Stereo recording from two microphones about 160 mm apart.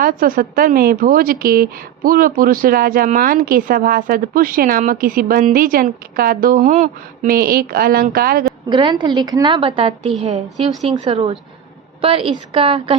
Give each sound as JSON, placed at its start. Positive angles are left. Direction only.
{"t": 0.0, "sound": "a woman's voice", "side_deg": -60}
{"t": 8.7, "sound": "a woman's voice", "side_deg": -30}
{"t": 10.8, "sound": "a woman's voice", "side_deg": -30}